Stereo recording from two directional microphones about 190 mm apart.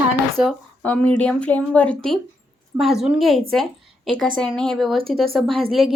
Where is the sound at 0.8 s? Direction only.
10° left (ahead or behind).